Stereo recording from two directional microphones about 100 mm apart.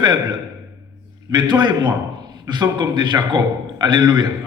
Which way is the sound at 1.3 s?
50° right (ahead or behind).